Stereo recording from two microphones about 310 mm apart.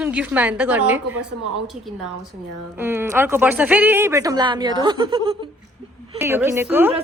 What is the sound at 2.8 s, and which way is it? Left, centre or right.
Speech, centre.